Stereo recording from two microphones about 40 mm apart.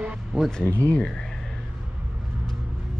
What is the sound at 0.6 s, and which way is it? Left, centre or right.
Speech, left.